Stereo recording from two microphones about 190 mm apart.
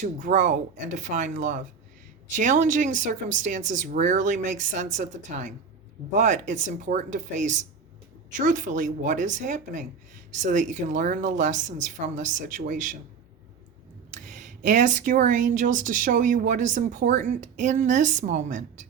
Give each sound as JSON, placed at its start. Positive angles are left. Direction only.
{"t": 0.0, "sound": "speech", "side_deg": -40}
{"t": 14.1, "sound": "speech", "side_deg": -40}